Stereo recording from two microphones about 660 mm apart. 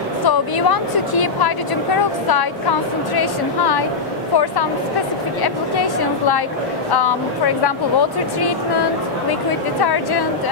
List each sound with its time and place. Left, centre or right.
0.2 s speech: left
5.4 s speech: left